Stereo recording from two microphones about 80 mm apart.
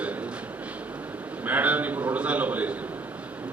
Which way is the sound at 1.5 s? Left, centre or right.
Centre.